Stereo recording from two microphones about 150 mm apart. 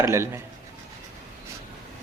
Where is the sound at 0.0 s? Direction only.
20° right (ahead or behind).